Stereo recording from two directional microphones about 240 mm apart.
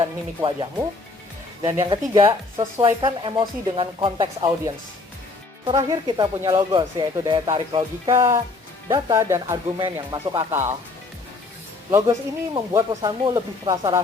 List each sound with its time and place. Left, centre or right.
0.0 s speech: centre
11.9 s speech: centre